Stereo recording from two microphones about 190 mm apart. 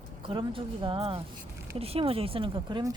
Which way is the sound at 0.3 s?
25° right (ahead or behind).